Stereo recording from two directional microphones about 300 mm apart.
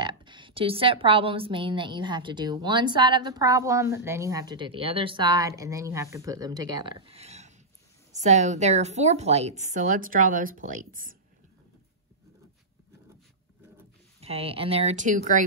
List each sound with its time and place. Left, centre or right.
0.0 s a woman's voice: centre
14.2 s a woman's voice: centre